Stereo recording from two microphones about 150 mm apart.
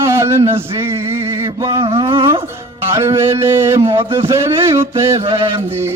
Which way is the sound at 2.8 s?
15° right (ahead or behind).